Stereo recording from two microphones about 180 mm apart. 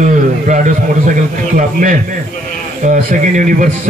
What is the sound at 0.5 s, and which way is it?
A man's voice, 45° right (ahead or behind).